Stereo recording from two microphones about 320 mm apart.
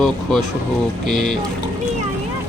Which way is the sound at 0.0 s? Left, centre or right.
Centre.